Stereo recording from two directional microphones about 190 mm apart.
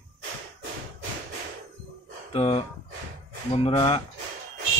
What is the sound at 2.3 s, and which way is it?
Speech, 35° left (ahead or behind).